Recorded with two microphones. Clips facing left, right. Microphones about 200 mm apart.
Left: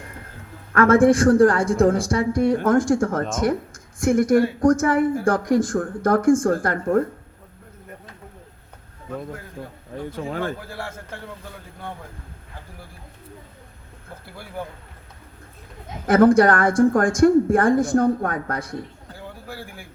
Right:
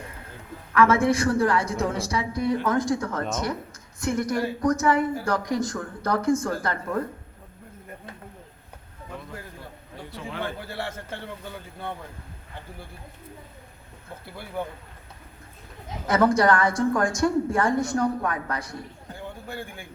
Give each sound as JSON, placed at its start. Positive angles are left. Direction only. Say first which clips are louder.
{"t": 0.7, "sound": "a woman's voice", "louder": "left 5 dB", "side_deg": 50}
{"t": 10.1, "sound": "a woman's voice", "louder": "left 5 dB", "side_deg": 45}
{"t": 16.0, "sound": "a woman's voice", "louder": "left 6 dB", "side_deg": 55}